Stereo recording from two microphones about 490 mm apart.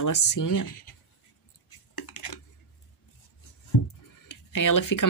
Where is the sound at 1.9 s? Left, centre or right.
Left.